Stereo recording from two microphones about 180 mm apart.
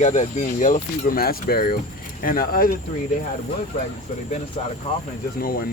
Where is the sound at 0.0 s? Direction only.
40° left (ahead or behind).